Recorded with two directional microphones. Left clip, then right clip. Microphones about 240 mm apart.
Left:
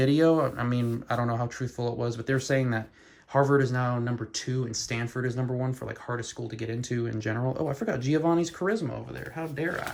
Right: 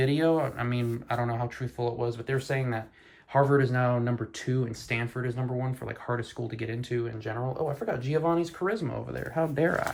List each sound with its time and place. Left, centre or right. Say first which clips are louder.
0.0 s speech: left 3 dB; centre
3.3 s speech: even; centre
6.9 s speech: left 1 dB; left
9.3 s speech: right 6 dB; centre